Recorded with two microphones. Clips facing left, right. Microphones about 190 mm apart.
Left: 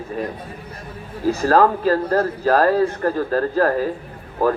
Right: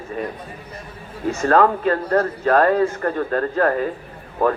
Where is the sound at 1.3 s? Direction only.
35° left (ahead or behind).